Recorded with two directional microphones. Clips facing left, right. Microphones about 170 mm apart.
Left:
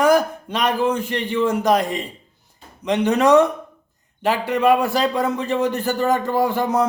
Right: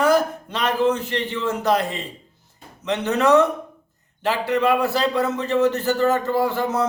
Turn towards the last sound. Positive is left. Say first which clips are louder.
# left 2 dB
turn(degrees=15)  # may be behind; listen again after turning